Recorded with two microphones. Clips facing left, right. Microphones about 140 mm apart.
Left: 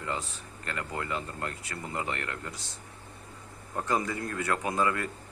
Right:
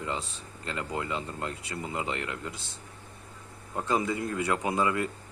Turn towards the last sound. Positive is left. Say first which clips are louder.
# right 1 dB
turn(degrees=-20)  # may be behind; listen again after turning